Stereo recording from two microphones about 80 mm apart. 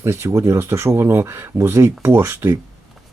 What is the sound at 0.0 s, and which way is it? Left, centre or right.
Speech, right.